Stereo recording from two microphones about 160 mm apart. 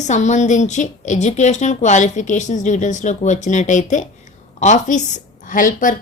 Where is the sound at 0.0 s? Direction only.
50° left (ahead or behind).